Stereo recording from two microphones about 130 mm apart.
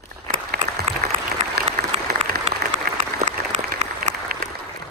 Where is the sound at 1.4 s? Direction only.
60° right (ahead or behind).